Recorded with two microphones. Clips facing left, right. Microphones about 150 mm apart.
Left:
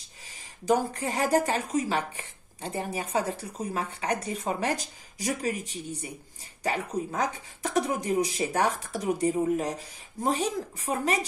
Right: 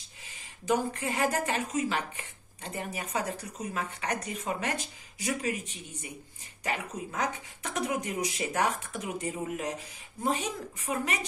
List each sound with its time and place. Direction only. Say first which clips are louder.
0.7 s a woman's voice: left 3 dB; 40° left (ahead or behind)